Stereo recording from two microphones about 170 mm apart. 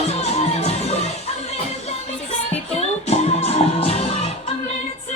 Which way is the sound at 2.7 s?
40° left (ahead or behind).